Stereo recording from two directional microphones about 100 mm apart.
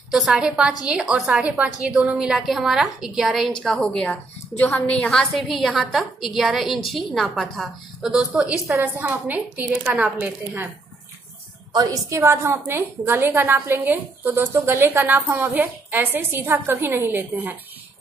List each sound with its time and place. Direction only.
0.1 s a woman's voice: 5° right (ahead or behind)
8.7 s a woman's voice: 25° right (ahead or behind)
11.7 s a woman's voice: 40° right (ahead or behind)
12.2 s a woman's voice: 25° right (ahead or behind)